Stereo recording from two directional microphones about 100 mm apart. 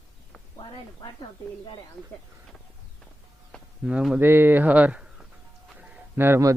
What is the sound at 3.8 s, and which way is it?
Speech, 10° right (ahead or behind).